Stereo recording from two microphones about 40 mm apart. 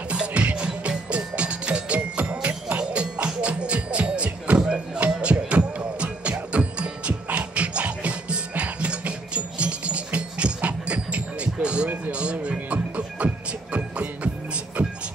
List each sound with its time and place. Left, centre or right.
0.1 s music: right
5.0 s music: right